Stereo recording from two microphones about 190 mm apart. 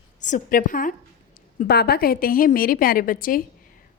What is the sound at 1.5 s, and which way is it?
A woman's voice, 55° left (ahead or behind).